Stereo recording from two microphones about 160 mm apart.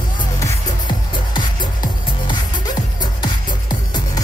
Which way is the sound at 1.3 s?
30° left (ahead or behind).